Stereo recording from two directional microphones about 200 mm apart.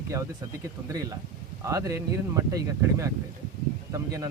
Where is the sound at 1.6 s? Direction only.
15° right (ahead or behind).